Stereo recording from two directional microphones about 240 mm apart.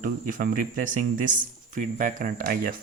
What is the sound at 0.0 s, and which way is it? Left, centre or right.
Speech, right.